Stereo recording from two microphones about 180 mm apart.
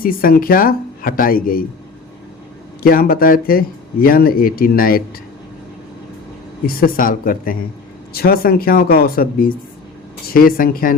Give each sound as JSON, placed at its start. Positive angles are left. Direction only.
{"t": 0.0, "sound": "speech", "side_deg": 55}
{"t": 2.8, "sound": "speech", "side_deg": 55}
{"t": 6.7, "sound": "speech", "side_deg": 55}